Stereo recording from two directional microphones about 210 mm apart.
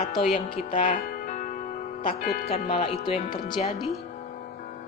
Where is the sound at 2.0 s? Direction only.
40° left (ahead or behind).